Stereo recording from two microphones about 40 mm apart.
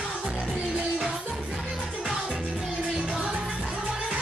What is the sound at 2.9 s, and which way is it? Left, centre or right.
Music, centre.